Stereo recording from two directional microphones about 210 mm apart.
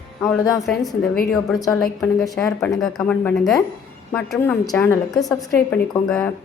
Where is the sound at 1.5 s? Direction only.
15° left (ahead or behind).